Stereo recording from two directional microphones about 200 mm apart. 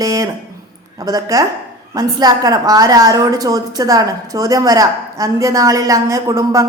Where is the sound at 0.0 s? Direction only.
15° right (ahead or behind).